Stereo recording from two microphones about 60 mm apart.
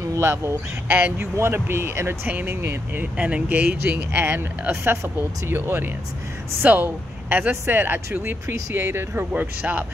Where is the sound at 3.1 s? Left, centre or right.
Right.